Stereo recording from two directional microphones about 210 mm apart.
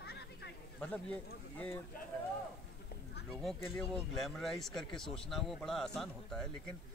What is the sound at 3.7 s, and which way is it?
Speech, centre (ahead or behind).